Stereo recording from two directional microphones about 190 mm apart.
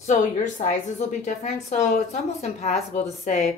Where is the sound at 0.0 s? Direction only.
40° left (ahead or behind).